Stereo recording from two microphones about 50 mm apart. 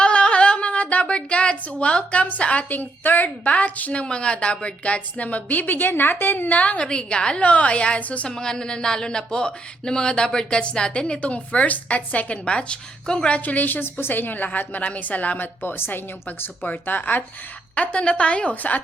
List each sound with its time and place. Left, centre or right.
0.0 s a sound: left
2.2 s a woman's voice: left
8.3 s speech: centre
13.4 s a woman's voice: left
15.6 s a woman's voice: left
17.7 s a woman's voice: left